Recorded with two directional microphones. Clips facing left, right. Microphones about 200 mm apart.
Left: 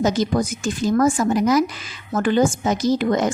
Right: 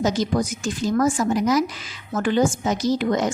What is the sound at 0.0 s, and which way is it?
Speech, 50° left (ahead or behind).